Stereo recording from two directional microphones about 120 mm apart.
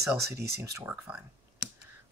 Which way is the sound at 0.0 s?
25° right (ahead or behind).